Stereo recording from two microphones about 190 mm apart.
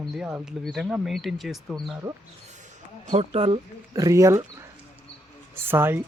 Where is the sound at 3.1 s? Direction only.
35° right (ahead or behind).